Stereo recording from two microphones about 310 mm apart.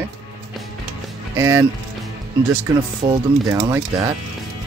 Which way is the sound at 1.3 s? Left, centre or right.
Centre.